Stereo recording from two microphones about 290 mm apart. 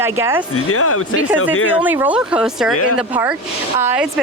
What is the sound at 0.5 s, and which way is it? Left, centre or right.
Speech, left.